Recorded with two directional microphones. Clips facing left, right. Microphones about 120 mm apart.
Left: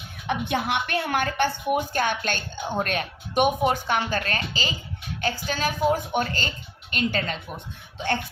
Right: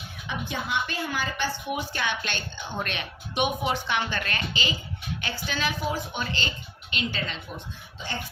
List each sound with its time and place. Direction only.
0.3 s a woman's voice: 70° left (ahead or behind); by 7.3 s 50° left (ahead or behind)
7.9 s speech: 60° left (ahead or behind)